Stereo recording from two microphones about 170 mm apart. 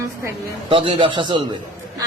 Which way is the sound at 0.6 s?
30° right (ahead or behind).